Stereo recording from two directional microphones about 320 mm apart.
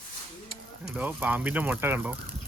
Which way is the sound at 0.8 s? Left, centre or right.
Centre.